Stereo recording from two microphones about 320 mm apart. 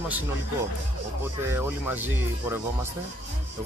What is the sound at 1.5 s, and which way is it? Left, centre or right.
Speech, centre.